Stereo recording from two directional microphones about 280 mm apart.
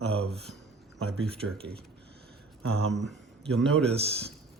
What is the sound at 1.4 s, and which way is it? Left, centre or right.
Speech, right.